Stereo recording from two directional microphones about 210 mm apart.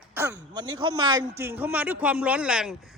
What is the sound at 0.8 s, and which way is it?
A man's voice, 20° right (ahead or behind).